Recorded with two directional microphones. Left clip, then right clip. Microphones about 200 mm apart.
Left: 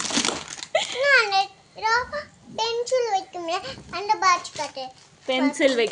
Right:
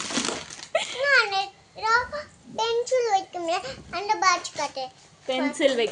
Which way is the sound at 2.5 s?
Centre (ahead or behind).